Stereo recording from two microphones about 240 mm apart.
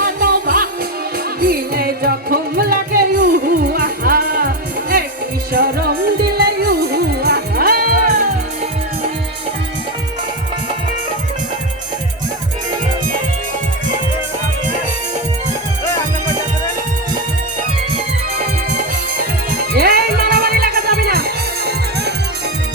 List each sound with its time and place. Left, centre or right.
0.0 s music: right
19.7 s music: right